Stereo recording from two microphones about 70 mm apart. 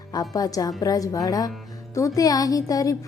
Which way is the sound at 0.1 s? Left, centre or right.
Left.